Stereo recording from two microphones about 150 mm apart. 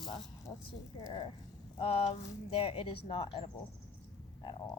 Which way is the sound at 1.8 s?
40° left (ahead or behind).